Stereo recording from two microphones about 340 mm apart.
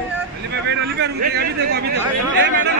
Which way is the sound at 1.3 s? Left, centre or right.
Right.